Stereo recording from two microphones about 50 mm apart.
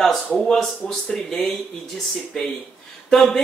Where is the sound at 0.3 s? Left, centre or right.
Centre.